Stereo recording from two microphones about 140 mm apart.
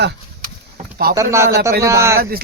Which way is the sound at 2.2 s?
90° right.